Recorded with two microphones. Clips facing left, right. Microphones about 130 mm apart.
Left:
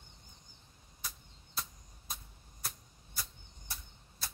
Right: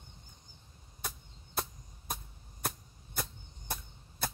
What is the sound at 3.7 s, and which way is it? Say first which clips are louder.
Chop: right 9 dB; 55° right (ahead or behind).